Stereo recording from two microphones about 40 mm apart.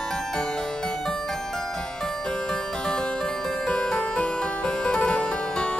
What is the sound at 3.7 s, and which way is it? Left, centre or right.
Music, centre.